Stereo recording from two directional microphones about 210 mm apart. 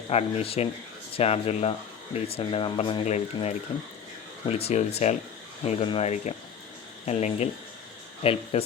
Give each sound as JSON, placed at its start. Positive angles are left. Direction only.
{"t": 0.1, "sound": "speech", "side_deg": 30}